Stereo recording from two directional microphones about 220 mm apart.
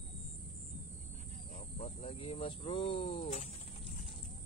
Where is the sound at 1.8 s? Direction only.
30° left (ahead or behind).